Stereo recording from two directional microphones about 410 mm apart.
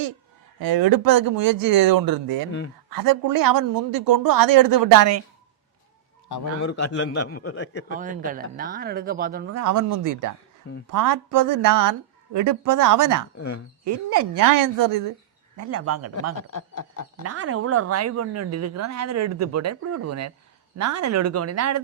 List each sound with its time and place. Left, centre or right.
0.6 s a woman's voice: right
6.6 s a man's voice: left
7.9 s speech: centre
9.5 s a woman's voice: right
15.5 s speech: right
16.3 s speech: left
17.2 s speech: right